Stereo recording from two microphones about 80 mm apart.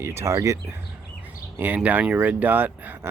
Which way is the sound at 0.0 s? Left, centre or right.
Right.